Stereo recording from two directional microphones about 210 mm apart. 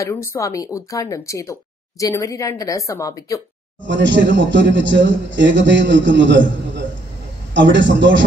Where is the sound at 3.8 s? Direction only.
60° right (ahead or behind).